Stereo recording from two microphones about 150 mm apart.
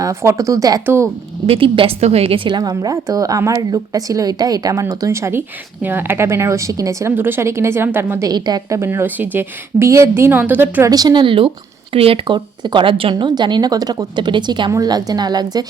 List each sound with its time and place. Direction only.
0.0 s a woman's voice: 20° right (ahead or behind)
1.5 s a woman's voice: 35° right (ahead or behind); by 8.3 s 15° right (ahead or behind)
8.3 s a woman's voice: 25° right (ahead or behind)
10.9 s a woman's voice: 30° right (ahead or behind)